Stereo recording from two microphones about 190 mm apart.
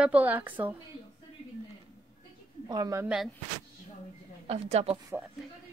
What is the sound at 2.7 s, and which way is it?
Speech, 20° right (ahead or behind).